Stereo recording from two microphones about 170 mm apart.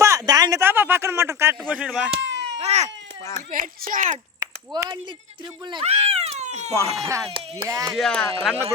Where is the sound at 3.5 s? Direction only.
50° right (ahead or behind).